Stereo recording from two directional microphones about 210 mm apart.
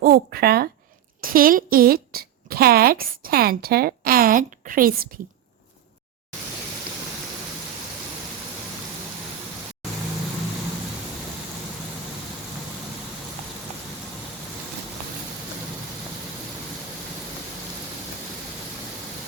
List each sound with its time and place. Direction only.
0.0 s a woman's voice: 45° right (ahead or behind)